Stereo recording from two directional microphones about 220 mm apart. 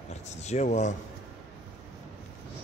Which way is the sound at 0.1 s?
30° left (ahead or behind).